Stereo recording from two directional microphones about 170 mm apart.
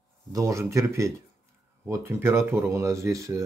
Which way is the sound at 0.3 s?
20° right (ahead or behind).